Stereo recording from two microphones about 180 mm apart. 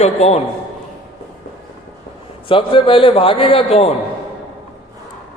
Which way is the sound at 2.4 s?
30° left (ahead or behind).